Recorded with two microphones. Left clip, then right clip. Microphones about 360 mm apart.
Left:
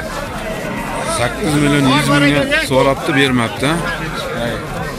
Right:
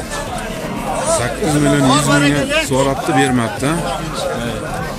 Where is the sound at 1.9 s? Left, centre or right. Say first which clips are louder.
Even; right.